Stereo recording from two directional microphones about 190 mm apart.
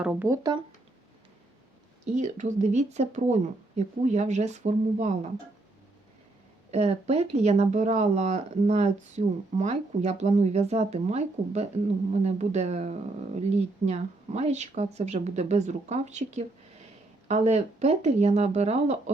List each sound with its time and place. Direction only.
0.0 s speech: 5° right (ahead or behind)
2.1 s speech: 40° right (ahead or behind)
6.7 s speech: 35° right (ahead or behind)